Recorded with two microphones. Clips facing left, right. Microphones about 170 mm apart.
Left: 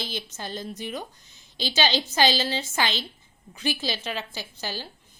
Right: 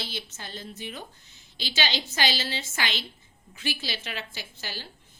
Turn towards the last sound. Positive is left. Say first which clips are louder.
# left 4 dB
turn(degrees=40)  # may be behind; listen again after turning